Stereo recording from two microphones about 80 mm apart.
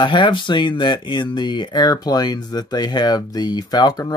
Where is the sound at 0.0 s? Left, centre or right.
Left.